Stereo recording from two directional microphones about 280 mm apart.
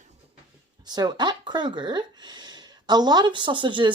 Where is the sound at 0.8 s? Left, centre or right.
Centre.